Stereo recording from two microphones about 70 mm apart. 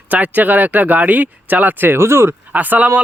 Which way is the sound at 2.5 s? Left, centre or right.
Right.